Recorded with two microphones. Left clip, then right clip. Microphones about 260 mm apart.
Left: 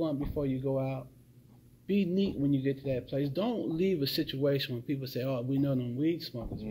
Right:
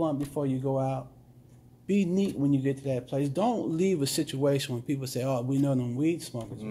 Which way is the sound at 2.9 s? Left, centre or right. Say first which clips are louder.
Right 2 dB; right.